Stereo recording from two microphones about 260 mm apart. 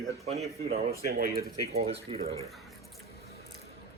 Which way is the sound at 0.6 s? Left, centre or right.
Right.